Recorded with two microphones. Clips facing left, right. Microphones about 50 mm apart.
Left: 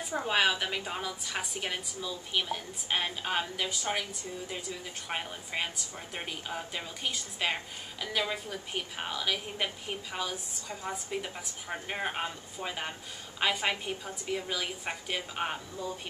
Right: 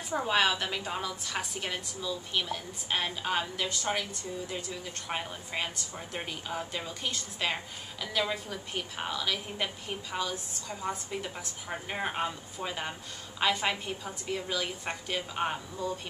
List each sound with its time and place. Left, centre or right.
0.3 s a woman's voice: centre